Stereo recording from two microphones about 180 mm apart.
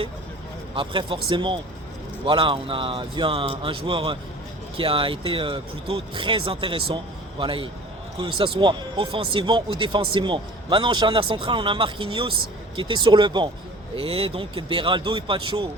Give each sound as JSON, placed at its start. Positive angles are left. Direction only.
{"t": 0.8, "sound": "a man's voice", "side_deg": -30}